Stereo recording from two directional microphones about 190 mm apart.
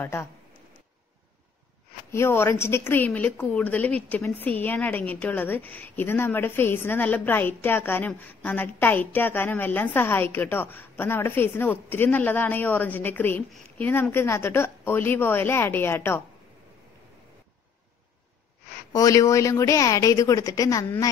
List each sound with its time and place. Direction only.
0.0 s a woman's voice: 15° left (ahead or behind)
2.1 s a woman's voice: 15° left (ahead or behind)
18.9 s a woman's voice: 20° left (ahead or behind)